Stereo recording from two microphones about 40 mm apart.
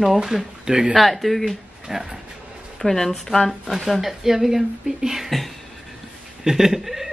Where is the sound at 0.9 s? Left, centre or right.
Centre.